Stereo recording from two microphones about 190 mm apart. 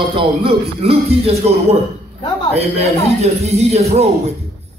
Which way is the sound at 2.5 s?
35° right (ahead or behind).